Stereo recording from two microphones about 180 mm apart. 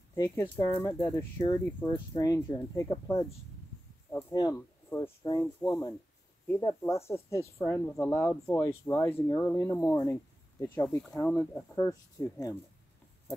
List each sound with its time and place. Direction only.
0.1 s speech: 15° left (ahead or behind)
4.3 s speech: 20° left (ahead or behind)